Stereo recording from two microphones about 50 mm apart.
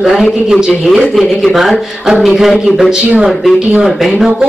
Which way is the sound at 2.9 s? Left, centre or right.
Right.